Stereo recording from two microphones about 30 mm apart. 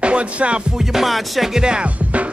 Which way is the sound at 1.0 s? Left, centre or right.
Centre.